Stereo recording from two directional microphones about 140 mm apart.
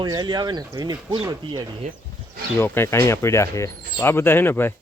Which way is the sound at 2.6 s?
15° left (ahead or behind).